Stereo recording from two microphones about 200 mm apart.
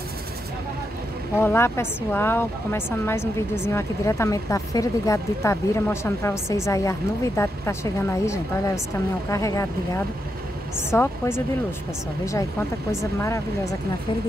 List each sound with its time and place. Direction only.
1.3 s speech: 10° left (ahead or behind)
13.0 s speech: 15° left (ahead or behind)